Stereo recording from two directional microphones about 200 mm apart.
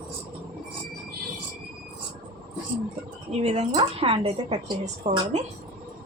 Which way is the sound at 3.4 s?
35° right (ahead or behind).